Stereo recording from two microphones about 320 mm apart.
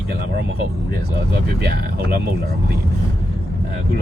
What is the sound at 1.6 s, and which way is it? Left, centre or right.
Speech, right.